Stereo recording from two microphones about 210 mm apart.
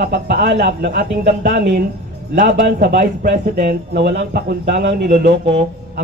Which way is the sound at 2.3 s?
40° right (ahead or behind).